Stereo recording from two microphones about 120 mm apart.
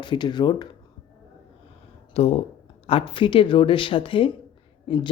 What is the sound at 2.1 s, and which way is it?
A woman's voice, 60° left (ahead or behind).